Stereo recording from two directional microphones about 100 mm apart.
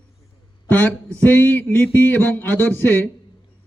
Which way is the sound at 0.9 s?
10° left (ahead or behind).